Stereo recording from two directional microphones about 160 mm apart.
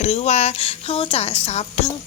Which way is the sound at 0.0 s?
40° left (ahead or behind).